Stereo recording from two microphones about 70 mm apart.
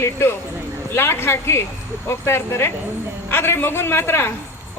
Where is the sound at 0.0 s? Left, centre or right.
Left.